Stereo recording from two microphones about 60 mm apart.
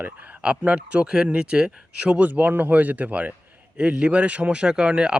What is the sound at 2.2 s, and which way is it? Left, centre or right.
Speech, right.